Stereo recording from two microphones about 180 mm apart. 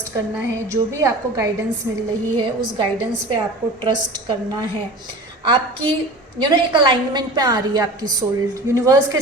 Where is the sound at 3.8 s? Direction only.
25° right (ahead or behind).